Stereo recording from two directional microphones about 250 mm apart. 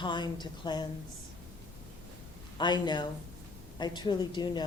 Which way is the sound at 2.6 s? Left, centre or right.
Centre.